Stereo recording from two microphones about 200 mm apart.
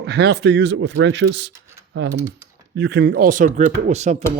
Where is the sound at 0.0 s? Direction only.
55° right (ahead or behind).